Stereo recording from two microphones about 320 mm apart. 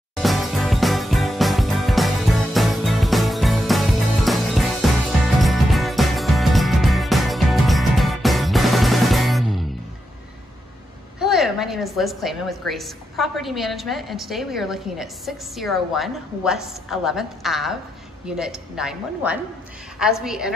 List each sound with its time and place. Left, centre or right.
0.1 s music: centre
11.1 s a woman's voice: centre